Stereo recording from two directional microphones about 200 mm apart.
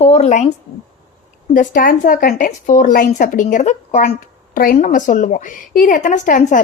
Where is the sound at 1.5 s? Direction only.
40° left (ahead or behind).